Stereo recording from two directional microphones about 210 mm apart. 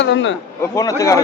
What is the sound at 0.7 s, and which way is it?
Speech, 15° left (ahead or behind).